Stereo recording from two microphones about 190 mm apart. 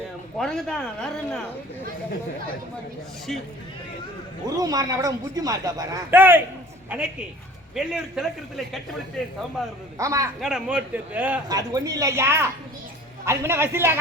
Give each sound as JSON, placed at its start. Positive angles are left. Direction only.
{"t": 0.3, "sound": "a man's voice", "side_deg": 5}
{"t": 4.4, "sound": "a man's voice", "side_deg": -20}
{"t": 10.0, "sound": "speech", "side_deg": -15}
{"t": 10.4, "sound": "speech", "side_deg": -5}
{"t": 11.4, "sound": "speech", "side_deg": -20}